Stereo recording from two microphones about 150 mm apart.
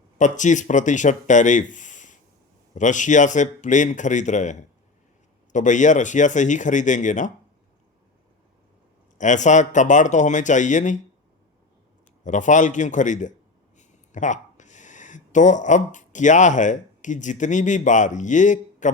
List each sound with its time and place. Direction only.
0.2 s speech: 55° left (ahead or behind)
9.1 s speech: 55° left (ahead or behind)
12.2 s speech: 55° left (ahead or behind)